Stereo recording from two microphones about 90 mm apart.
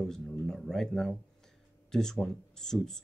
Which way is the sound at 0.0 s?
5° left (ahead or behind).